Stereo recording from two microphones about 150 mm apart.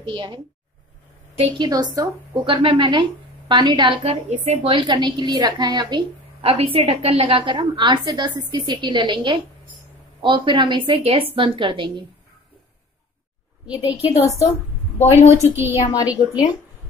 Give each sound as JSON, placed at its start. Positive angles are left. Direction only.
{"t": 0.0, "sound": "a woman's voice", "side_deg": -30}
{"t": 1.6, "sound": "a woman's voice", "side_deg": -30}
{"t": 13.7, "sound": "a woman's voice", "side_deg": 40}
{"t": 15.2, "sound": "a woman's voice", "side_deg": -15}
{"t": 15.9, "sound": "a woman's voice", "side_deg": 25}